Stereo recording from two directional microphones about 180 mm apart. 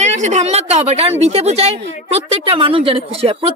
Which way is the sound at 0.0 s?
40° right (ahead or behind).